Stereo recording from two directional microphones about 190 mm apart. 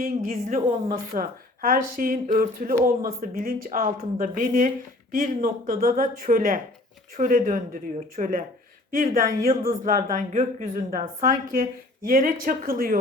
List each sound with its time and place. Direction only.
0.0 s a woman's voice: 45° right (ahead or behind)